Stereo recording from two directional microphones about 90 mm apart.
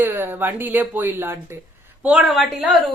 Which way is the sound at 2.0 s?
10° right (ahead or behind).